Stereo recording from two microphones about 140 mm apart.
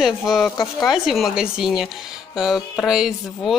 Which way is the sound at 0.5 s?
25° left (ahead or behind).